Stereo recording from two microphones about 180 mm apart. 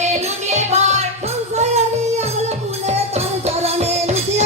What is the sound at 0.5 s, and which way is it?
Music, 40° right (ahead or behind).